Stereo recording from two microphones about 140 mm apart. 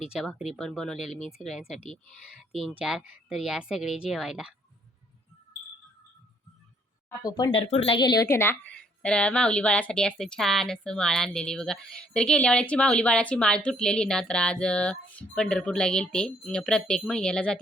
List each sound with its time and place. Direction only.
0.0 s speech: 5° right (ahead or behind)
7.2 s speech: 30° left (ahead or behind)
7.7 s speech: 45° left (ahead or behind)
7.9 s speech: 30° left (ahead or behind)
8.3 s speech: 15° left (ahead or behind)